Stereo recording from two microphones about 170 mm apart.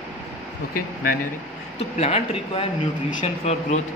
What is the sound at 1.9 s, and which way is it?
Speech, 35° left (ahead or behind).